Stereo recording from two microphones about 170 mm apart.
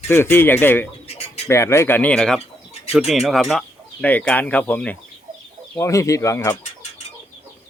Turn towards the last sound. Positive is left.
turn(degrees=15)  # may be behind; listen again after turning